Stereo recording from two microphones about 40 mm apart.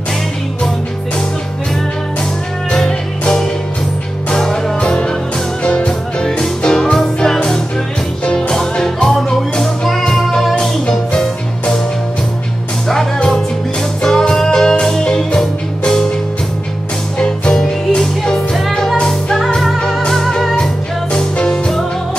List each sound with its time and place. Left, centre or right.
2.7 s music: centre
5.6 s music: left
5.9 s music: centre
8.4 s music: centre
14.0 s music: centre
17.2 s music: left
18.5 s music: centre
18.9 s music: centre
21.1 s music: left